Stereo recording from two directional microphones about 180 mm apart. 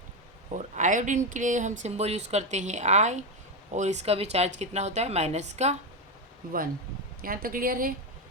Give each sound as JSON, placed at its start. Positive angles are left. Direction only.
{"t": 0.5, "sound": "speech", "side_deg": -45}
{"t": 7.2, "sound": "speech", "side_deg": -50}